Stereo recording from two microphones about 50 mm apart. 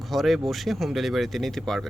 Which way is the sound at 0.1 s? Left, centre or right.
Centre.